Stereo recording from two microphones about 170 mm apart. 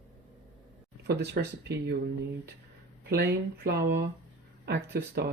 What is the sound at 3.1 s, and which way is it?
Speech, 75° right (ahead or behind).